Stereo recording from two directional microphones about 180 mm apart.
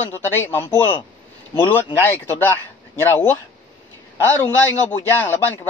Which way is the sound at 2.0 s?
15° left (ahead or behind).